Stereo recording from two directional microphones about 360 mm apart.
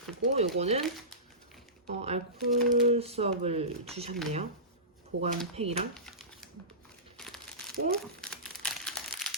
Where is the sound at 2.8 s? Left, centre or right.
Centre.